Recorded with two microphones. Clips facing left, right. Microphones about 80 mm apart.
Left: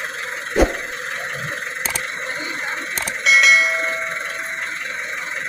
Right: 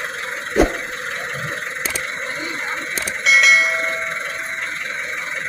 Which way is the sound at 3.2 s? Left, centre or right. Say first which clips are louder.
Even; centre.